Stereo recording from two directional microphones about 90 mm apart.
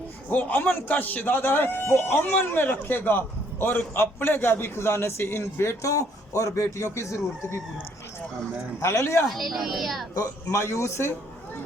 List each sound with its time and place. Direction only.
0.3 s a man's voice: 20° left (ahead or behind)
8.8 s a man's voice: 35° left (ahead or behind)
9.3 s speech: centre (ahead or behind)
10.2 s a man's voice: 30° left (ahead or behind)